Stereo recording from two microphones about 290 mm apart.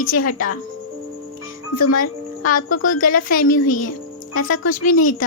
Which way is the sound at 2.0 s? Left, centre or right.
Left.